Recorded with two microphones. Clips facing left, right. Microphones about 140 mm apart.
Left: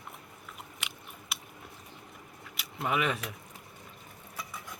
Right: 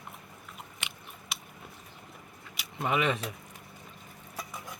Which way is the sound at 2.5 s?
Centre (ahead or behind).